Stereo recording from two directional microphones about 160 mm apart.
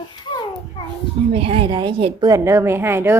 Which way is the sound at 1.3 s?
35° right (ahead or behind).